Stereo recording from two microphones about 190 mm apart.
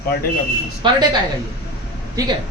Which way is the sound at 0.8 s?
25° right (ahead or behind).